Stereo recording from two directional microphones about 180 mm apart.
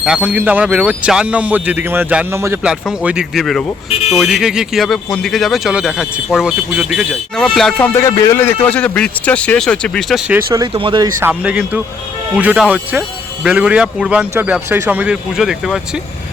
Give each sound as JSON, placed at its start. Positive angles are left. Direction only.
{"t": 0.0, "sound": "speech", "side_deg": -5}
{"t": 7.9, "sound": "a man's voice", "side_deg": 15}
{"t": 10.5, "sound": "speech", "side_deg": -25}
{"t": 11.2, "sound": "speech", "side_deg": -10}